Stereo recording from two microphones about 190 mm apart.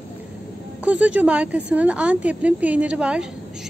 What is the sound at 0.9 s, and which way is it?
Speech, 5° right (ahead or behind).